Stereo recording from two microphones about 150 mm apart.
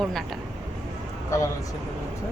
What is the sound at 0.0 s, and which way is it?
Speech, centre (ahead or behind).